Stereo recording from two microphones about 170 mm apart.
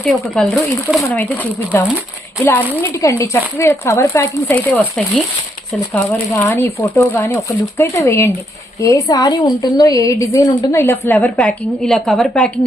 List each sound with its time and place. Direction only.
0.0 s a woman's voice: centre (ahead or behind)
1.0 s a woman's voice: 10° left (ahead or behind)